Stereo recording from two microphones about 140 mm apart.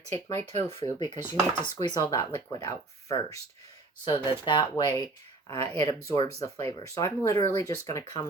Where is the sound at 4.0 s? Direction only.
35° left (ahead or behind).